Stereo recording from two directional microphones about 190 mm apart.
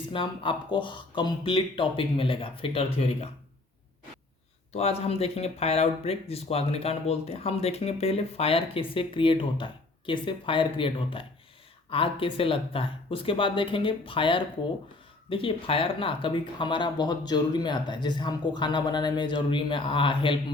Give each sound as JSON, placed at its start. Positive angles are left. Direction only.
{"t": 0.1, "sound": "speech", "side_deg": 25}
{"t": 4.7, "sound": "speech", "side_deg": 30}